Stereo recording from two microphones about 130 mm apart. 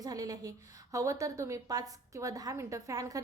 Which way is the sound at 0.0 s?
30° right (ahead or behind).